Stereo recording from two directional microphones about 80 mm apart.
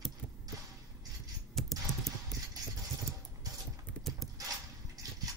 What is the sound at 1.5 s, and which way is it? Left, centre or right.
Typing, centre.